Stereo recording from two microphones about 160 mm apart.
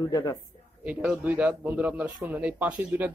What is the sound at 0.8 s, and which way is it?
A man's voice, 5° right (ahead or behind).